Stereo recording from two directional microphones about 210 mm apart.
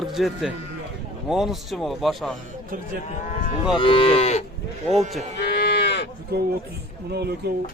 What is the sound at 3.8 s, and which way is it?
Moo, 25° left (ahead or behind).